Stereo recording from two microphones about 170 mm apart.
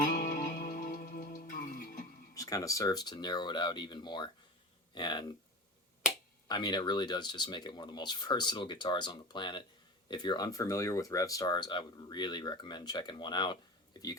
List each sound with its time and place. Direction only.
0.0 s music: 50° left (ahead or behind)
2.3 s speech: 20° left (ahead or behind)
6.5 s speech: 25° left (ahead or behind)